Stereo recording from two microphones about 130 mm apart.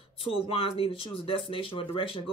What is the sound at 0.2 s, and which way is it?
Speech, 45° left (ahead or behind).